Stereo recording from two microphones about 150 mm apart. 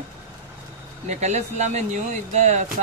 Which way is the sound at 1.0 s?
50° right (ahead or behind).